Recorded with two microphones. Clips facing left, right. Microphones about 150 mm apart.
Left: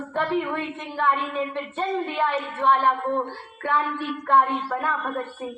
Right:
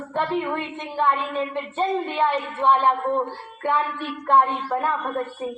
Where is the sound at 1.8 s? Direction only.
20° right (ahead or behind).